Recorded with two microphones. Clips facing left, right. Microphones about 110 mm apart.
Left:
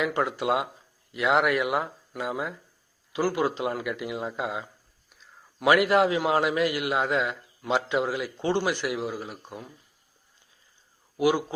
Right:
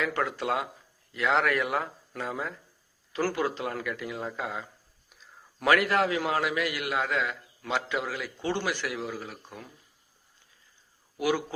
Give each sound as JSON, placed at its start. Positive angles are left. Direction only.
{"t": 0.0, "sound": "a man's voice", "side_deg": 20}
{"t": 5.0, "sound": "a sound", "side_deg": 0}
{"t": 5.6, "sound": "a man's voice", "side_deg": 20}
{"t": 11.2, "sound": "a man's voice", "side_deg": 20}